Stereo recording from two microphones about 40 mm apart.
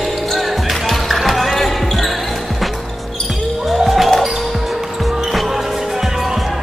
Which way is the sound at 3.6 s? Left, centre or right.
Centre.